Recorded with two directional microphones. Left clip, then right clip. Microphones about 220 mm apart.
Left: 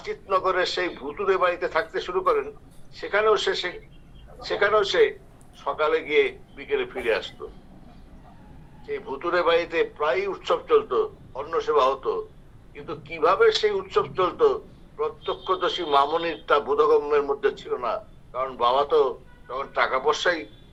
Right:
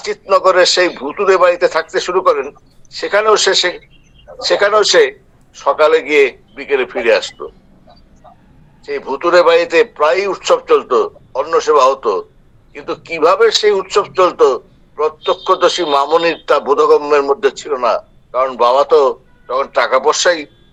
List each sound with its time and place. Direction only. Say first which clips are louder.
0.0 s a man's voice: right 12 dB; 60° right (ahead or behind)
8.9 s a man's voice: right 13 dB; 60° right (ahead or behind)